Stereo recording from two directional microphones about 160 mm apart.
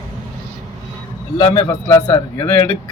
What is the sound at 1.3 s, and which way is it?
Speech, 25° left (ahead or behind).